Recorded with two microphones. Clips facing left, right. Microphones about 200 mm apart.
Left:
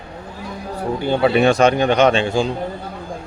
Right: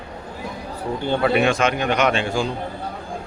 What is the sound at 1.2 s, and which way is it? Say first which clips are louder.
A man's voice: left 5 dB; 35° left (ahead or behind).